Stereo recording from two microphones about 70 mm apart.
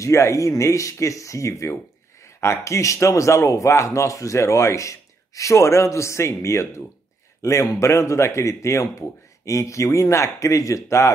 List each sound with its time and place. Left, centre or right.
0.0 s speech: left